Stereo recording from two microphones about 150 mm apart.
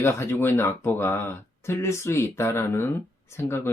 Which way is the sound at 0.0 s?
15° left (ahead or behind).